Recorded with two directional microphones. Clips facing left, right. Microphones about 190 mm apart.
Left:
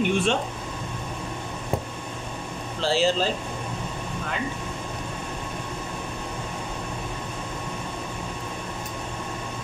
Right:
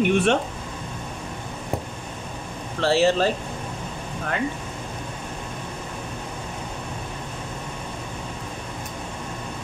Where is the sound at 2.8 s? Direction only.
65° right (ahead or behind).